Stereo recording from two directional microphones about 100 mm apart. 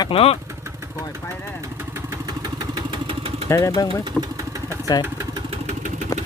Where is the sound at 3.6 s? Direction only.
40° left (ahead or behind).